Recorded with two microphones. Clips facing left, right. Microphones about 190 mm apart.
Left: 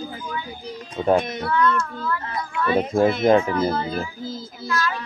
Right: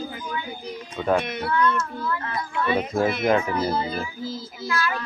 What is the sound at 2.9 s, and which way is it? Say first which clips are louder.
Speech: left 5 dB; 25° left (ahead or behind).